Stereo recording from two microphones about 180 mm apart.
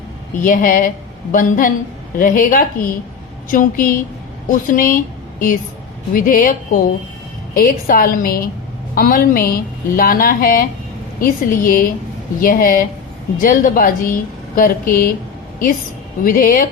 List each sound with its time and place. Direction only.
0.4 s a woman's voice: 50° left (ahead or behind)
16.2 s a woman's voice: 50° left (ahead or behind)